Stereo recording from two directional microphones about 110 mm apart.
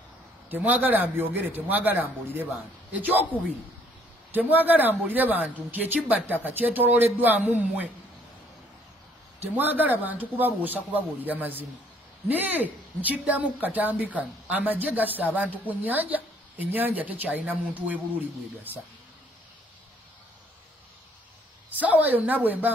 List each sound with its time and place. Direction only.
0.5 s a woman's voice: 15° right (ahead or behind)
4.3 s a woman's voice: 15° right (ahead or behind)
9.4 s a woman's voice: 15° right (ahead or behind)
21.8 s a woman's voice: 15° right (ahead or behind)